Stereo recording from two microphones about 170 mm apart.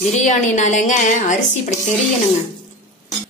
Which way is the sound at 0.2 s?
45° left (ahead or behind).